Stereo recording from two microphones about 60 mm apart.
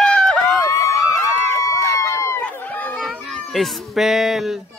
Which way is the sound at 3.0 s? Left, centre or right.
Centre.